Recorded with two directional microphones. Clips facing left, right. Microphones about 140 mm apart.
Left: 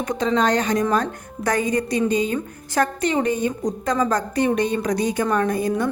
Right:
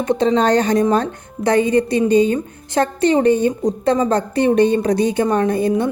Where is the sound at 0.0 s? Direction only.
30° right (ahead or behind).